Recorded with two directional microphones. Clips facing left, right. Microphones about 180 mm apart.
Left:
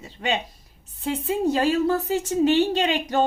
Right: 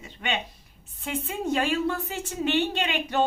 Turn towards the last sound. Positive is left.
turn(degrees=40)  # may be behind; listen again after turning